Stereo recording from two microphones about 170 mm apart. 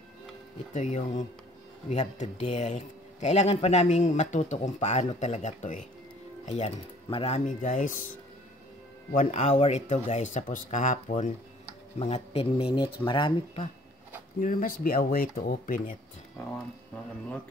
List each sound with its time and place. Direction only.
0.7 s speech: 45° left (ahead or behind)
9.1 s speech: 45° left (ahead or behind)
12.0 s speech: 35° left (ahead or behind)
14.4 s speech: 55° left (ahead or behind)